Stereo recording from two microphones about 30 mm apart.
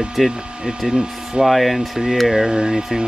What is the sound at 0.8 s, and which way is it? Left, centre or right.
Speech, right.